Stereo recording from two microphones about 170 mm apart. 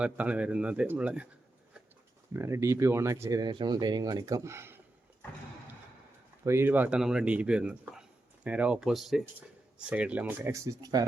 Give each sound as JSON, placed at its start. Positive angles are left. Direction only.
{"t": 0.0, "sound": "speech", "side_deg": -5}
{"t": 2.3, "sound": "speech", "side_deg": -15}
{"t": 6.4, "sound": "speech", "side_deg": -15}